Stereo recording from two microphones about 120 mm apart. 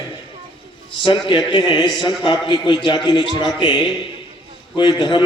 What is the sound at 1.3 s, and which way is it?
A man's voice, 45° left (ahead or behind).